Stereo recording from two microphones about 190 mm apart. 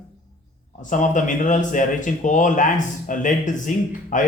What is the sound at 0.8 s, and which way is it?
Speech, 40° left (ahead or behind).